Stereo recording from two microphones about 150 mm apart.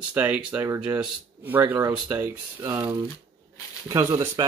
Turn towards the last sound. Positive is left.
turn(degrees=-20)  # may be behind; listen again after turning